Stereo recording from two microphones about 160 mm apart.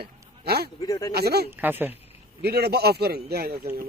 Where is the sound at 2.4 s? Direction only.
85° right.